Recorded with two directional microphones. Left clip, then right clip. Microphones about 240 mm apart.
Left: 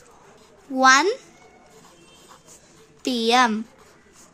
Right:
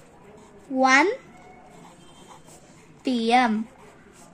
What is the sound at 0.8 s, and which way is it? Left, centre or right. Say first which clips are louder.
Speech: left 3 dB; left.